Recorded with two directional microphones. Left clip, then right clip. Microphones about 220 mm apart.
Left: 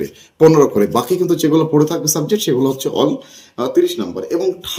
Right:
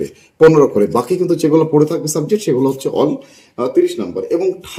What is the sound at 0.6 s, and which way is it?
Speech, 5° left (ahead or behind).